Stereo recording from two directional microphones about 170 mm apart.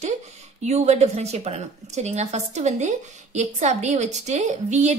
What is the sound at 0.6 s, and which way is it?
A woman's voice, 40° right (ahead or behind).